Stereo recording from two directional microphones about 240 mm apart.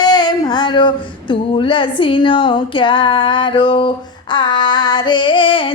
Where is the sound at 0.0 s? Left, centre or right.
Centre.